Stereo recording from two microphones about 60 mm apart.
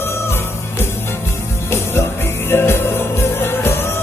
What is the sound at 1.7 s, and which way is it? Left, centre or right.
Music, left.